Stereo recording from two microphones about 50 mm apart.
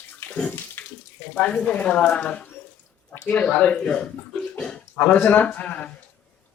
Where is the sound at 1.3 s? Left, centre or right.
Left.